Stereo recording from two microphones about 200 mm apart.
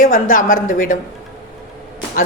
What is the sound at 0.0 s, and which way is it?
Speech, 40° left (ahead or behind).